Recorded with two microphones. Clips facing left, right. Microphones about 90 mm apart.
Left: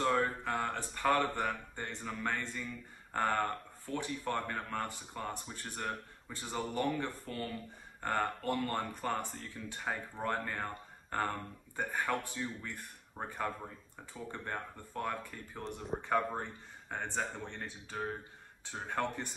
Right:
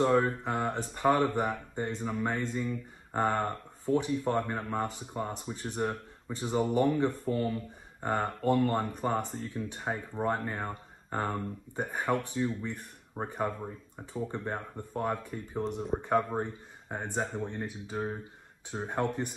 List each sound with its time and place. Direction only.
0.0 s speech: 25° right (ahead or behind)